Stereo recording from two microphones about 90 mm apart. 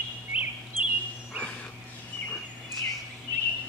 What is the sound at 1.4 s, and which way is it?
Dog, 15° left (ahead or behind).